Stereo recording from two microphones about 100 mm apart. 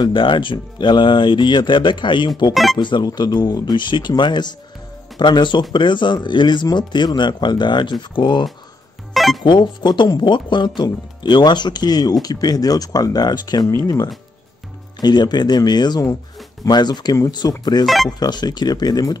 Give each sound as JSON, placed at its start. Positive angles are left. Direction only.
{"t": 0.0, "sound": "speech", "side_deg": 55}
{"t": 2.5, "sound": "speech", "side_deg": 0}
{"t": 2.8, "sound": "speech", "side_deg": 50}
{"t": 9.1, "sound": "music", "side_deg": 0}
{"t": 9.4, "sound": "speech", "side_deg": 50}
{"t": 17.8, "sound": "speech", "side_deg": 0}
{"t": 18.2, "sound": "speech", "side_deg": 45}